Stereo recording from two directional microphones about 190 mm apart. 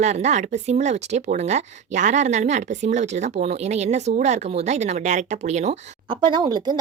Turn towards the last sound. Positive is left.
turn(degrees=-20)  # may be behind; listen again after turning